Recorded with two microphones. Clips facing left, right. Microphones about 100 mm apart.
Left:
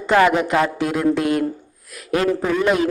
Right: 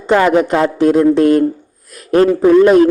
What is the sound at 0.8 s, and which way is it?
A man's voice, 40° right (ahead or behind).